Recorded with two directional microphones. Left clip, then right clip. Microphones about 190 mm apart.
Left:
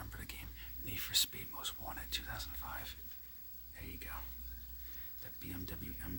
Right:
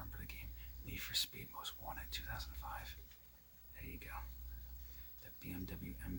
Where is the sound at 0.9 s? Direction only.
25° left (ahead or behind).